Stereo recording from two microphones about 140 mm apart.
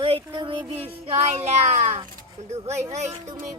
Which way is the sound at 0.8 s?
45° right (ahead or behind).